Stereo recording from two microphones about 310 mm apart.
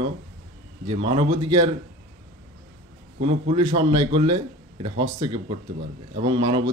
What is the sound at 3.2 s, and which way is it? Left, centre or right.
Speech, centre.